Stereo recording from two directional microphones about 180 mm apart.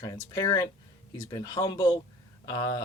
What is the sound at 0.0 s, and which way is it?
Speech, 20° left (ahead or behind).